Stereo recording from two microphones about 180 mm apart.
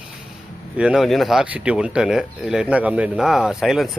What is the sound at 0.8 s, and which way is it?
Speech, 5° right (ahead or behind).